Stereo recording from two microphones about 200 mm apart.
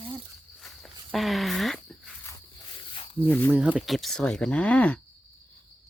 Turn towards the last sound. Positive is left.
turn(degrees=5)  # may be behind; listen again after turning